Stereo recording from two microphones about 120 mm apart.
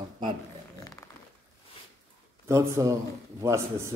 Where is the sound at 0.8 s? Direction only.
25° left (ahead or behind).